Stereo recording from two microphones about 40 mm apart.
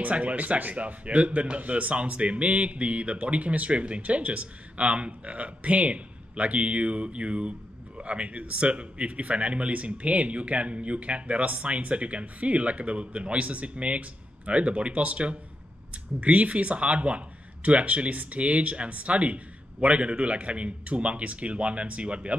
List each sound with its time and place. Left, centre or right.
0.0 s speech: right